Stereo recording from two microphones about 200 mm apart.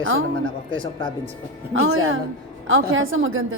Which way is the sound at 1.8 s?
85° right.